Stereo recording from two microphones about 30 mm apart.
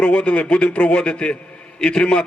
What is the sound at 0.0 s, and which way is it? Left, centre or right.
A man's voice, left.